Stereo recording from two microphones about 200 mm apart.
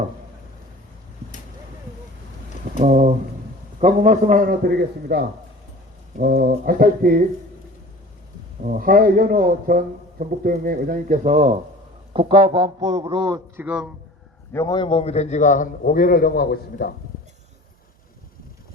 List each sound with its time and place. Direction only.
2.7 s a sound: 40° right (ahead or behind)
3.8 s a man's voice: 35° right (ahead or behind)
8.6 s a man's voice: 45° right (ahead or behind); by 13.4 s 25° right (ahead or behind)
13.6 s a man's voice: 5° right (ahead or behind)
14.5 s a man's voice: 20° left (ahead or behind); by 16.9 s 50° left (ahead or behind)